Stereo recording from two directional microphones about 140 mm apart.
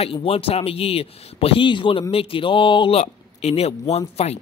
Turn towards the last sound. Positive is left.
turn(degrees=50)  # may be behind; listen again after turning